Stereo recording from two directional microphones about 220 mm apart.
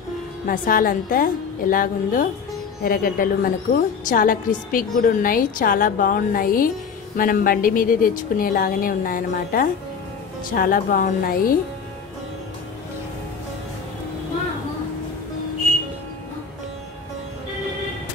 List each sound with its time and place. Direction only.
0.5 s a woman's voice: 40° left (ahead or behind)